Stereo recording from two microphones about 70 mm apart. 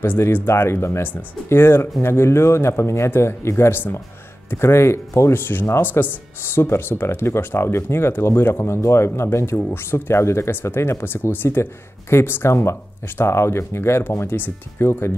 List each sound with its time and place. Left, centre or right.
0.0 s speech: left